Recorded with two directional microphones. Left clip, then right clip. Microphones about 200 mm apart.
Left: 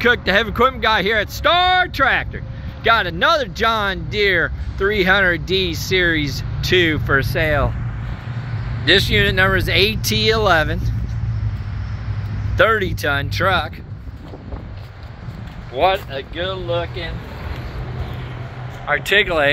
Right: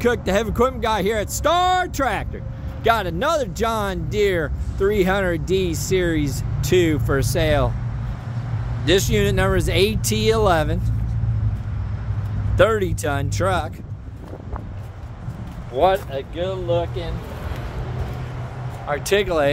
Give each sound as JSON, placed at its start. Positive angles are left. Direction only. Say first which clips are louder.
{"t": 0.0, "sound": "speech", "louder": "left 4 dB", "side_deg": -10}
{"t": 8.8, "sound": "speech", "louder": "left 4 dB", "side_deg": -15}
{"t": 12.5, "sound": "speech", "louder": "left 2 dB", "side_deg": -10}
{"t": 15.7, "sound": "speech", "louder": "left 1 dB", "side_deg": -20}
{"t": 18.9, "sound": "speech", "louder": "left 4 dB", "side_deg": -5}